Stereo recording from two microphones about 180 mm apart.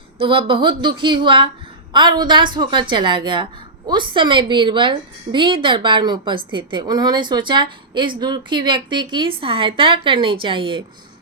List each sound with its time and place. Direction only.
0.2 s a woman's voice: 30° right (ahead or behind)